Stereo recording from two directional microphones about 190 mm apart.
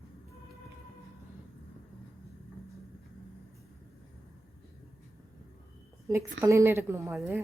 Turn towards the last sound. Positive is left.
turn(degrees=-15)  # may be behind; listen again after turning